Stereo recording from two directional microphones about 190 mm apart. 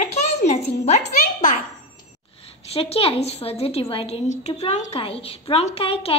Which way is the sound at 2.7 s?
30° left (ahead or behind).